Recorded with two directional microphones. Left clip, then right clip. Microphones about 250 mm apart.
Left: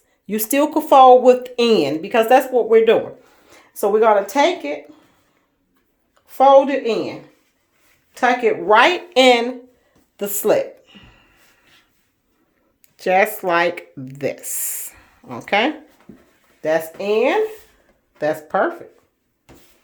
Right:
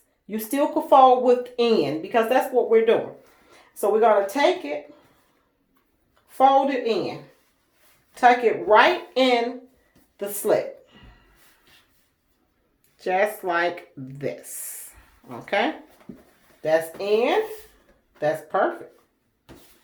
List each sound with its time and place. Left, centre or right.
0.3 s a woman's voice: left
6.2 s speech: left
8.1 s speech: left
11.0 s a sound: left
13.0 s speech: left